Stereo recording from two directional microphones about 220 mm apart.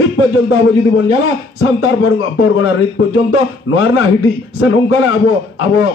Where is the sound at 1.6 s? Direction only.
70° left (ahead or behind).